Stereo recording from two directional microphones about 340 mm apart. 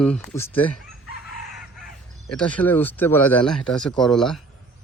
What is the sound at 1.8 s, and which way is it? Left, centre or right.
Speech, centre.